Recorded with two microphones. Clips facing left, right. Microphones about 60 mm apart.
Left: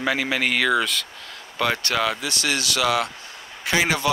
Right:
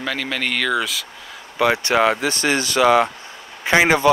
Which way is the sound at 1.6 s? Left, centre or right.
Centre.